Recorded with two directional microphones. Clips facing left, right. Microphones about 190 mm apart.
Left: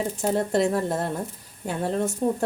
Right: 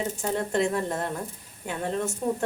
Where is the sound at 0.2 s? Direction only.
40° left (ahead or behind).